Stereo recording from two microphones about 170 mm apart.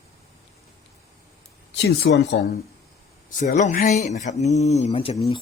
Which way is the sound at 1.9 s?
90° left.